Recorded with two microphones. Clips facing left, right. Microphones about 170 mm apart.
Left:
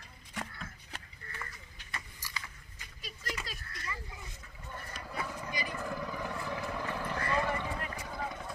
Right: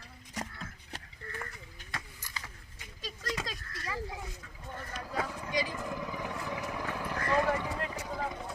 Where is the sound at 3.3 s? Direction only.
90° right.